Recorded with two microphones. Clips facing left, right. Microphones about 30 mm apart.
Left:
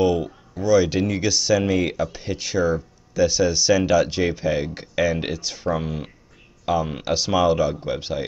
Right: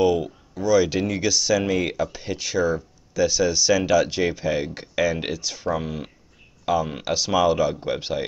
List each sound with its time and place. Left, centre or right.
0.0 s speech: centre